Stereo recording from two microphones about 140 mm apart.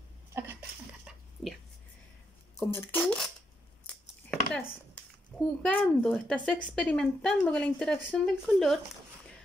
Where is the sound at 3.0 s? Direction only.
5° left (ahead or behind).